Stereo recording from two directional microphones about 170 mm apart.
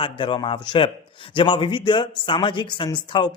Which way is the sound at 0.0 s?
30° left (ahead or behind).